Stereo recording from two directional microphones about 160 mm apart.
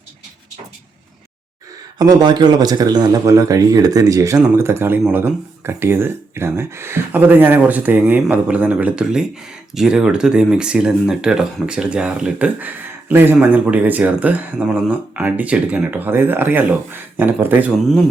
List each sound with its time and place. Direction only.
2.0 s speech: 25° right (ahead or behind); by 17.7 s 10° right (ahead or behind)
17.7 s speech: centre (ahead or behind)